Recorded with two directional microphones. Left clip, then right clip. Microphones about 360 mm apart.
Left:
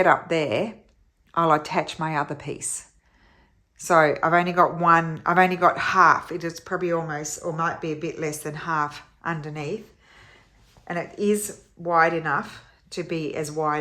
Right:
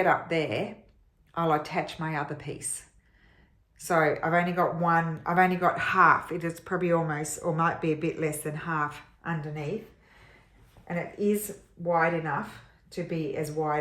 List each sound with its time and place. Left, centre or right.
0.0 s speech: centre
3.8 s speech: centre
10.8 s speech: centre